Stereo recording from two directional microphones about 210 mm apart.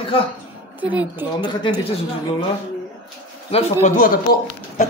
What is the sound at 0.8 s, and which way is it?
Speech, 10° right (ahead or behind).